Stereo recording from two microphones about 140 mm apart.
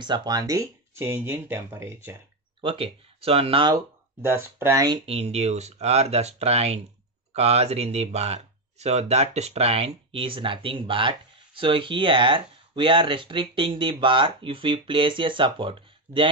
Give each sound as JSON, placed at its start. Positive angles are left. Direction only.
{"t": 0.0, "sound": "speech", "side_deg": -30}
{"t": 2.6, "sound": "speech", "side_deg": -40}
{"t": 3.7, "sound": "speech", "side_deg": -15}
{"t": 5.0, "sound": "speech", "side_deg": -45}